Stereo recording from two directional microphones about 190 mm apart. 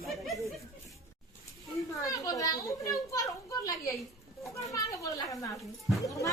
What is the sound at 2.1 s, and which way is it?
A child's voice, 20° left (ahead or behind).